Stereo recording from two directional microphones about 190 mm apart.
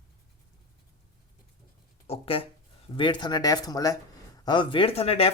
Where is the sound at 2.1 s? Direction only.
30° left (ahead or behind).